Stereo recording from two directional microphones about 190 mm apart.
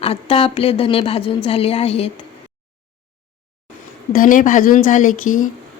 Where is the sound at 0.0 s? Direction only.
30° left (ahead or behind).